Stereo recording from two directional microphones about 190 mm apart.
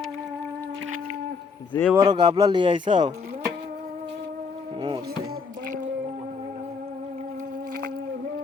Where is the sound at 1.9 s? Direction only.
20° right (ahead or behind).